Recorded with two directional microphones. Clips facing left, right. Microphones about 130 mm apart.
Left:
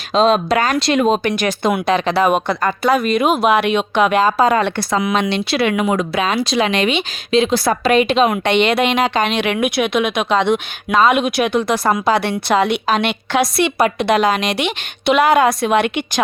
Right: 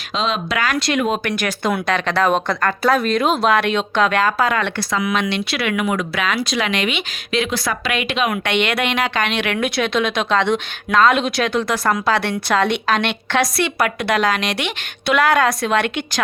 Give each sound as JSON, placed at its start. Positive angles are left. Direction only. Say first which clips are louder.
{"t": 0.1, "sound": "speech", "louder": "left 8 dB", "side_deg": 40}
{"t": 3.2, "sound": "a woman's voice", "louder": "left 2 dB", "side_deg": 15}
{"t": 13.4, "sound": "speech", "louder": "left 4 dB", "side_deg": 20}